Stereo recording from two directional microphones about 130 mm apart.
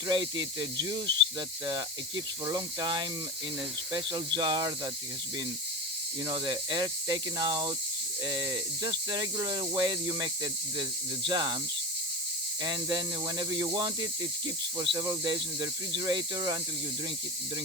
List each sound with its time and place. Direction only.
0.1 s speech: 35° right (ahead or behind)
6.2 s speech: 30° right (ahead or behind)
12.6 s speech: 35° right (ahead or behind)